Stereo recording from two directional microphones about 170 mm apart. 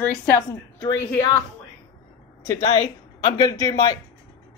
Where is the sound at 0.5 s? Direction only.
20° left (ahead or behind).